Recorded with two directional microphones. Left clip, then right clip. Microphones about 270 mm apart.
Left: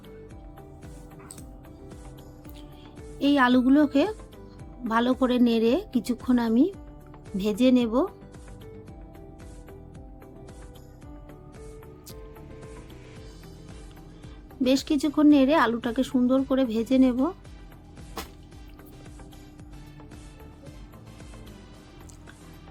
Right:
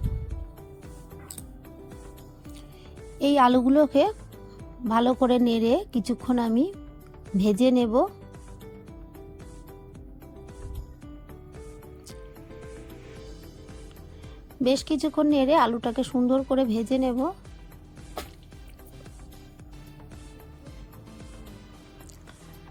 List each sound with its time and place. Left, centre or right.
3.2 s a woman's voice: right
14.6 s a woman's voice: right